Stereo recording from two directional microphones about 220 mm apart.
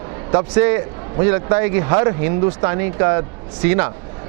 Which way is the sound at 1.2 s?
25° right (ahead or behind).